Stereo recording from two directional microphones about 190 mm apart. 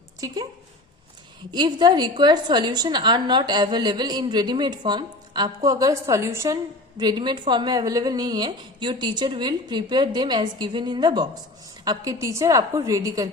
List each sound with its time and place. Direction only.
1.5 s a woman's voice: 25° right (ahead or behind)